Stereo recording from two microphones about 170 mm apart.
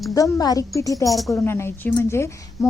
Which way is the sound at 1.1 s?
Centre (ahead or behind).